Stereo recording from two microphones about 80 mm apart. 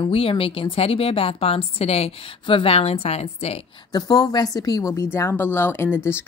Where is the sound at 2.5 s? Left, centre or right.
Left.